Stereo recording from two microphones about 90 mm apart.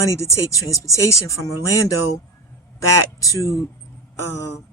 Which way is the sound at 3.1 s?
35° left (ahead or behind).